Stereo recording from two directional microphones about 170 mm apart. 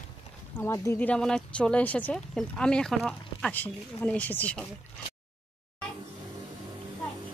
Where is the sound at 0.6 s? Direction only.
15° left (ahead or behind).